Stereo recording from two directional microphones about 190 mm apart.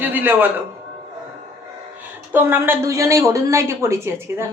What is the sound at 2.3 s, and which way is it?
Speech, 10° right (ahead or behind).